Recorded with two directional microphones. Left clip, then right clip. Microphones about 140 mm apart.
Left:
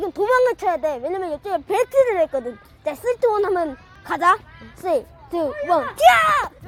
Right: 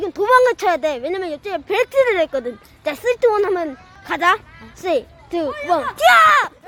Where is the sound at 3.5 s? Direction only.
5° right (ahead or behind).